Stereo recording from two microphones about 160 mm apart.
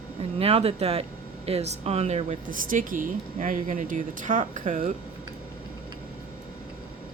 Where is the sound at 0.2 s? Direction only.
40° right (ahead or behind).